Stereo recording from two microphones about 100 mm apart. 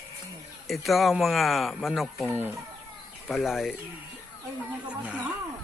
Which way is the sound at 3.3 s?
Centre (ahead or behind).